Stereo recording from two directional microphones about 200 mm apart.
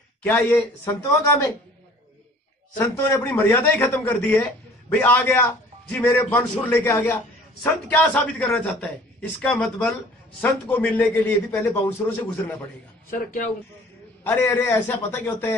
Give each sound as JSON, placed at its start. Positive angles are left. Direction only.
{"t": 0.2, "sound": "a man's voice", "side_deg": 10}
{"t": 2.8, "sound": "a man's voice", "side_deg": 10}
{"t": 13.1, "sound": "speech", "side_deg": 45}
{"t": 14.2, "sound": "a man's voice", "side_deg": 10}